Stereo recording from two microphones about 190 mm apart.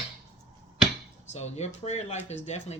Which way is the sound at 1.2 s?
35° left (ahead or behind).